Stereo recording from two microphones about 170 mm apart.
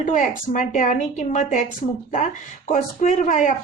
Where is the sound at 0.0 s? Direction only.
50° left (ahead or behind).